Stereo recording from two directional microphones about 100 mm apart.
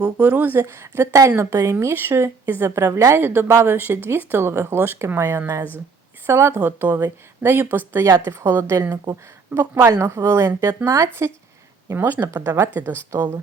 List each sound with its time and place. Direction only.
0.0 s speech: 15° right (ahead or behind)
11.9 s speech: 20° right (ahead or behind)